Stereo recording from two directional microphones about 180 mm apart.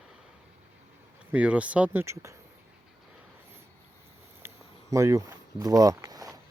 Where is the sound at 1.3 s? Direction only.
10° right (ahead or behind).